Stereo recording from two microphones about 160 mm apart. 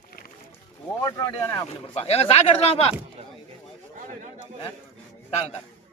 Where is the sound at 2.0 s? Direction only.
40° left (ahead or behind).